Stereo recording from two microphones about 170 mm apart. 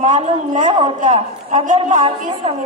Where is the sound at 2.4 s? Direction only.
35° right (ahead or behind).